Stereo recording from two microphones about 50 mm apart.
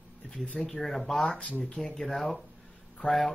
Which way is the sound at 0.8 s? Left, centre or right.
Centre.